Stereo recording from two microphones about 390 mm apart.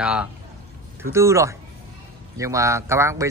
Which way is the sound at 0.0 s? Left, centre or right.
Centre.